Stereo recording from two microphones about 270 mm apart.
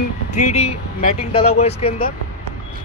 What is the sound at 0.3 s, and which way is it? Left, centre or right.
Speech, left.